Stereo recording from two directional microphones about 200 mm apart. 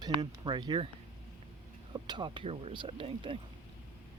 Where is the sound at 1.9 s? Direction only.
25° right (ahead or behind).